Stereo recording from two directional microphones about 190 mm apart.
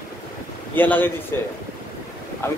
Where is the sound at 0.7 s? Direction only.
10° left (ahead or behind).